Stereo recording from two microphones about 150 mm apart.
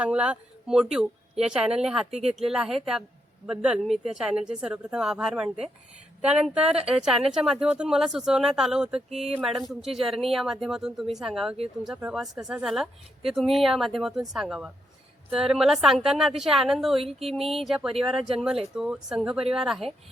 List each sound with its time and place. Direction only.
0.0 s speech: 5° right (ahead or behind)
2.0 s speech: 45° right (ahead or behind)
2.3 s a woman's voice: 5° right (ahead or behind)